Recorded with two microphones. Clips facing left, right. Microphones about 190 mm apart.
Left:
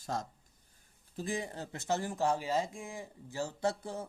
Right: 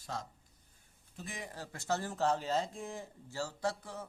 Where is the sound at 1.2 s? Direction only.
30° left (ahead or behind).